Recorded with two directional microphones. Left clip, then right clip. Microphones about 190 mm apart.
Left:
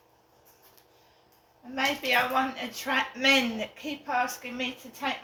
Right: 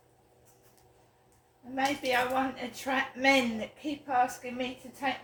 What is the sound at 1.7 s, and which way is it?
Speech, 15° right (ahead or behind).